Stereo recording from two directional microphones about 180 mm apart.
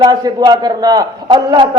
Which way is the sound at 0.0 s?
25° right (ahead or behind).